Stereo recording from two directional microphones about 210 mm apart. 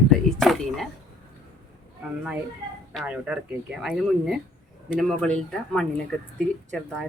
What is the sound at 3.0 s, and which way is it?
Speech, 5° right (ahead or behind).